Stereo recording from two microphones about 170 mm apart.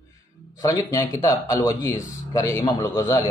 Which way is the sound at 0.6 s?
20° left (ahead or behind).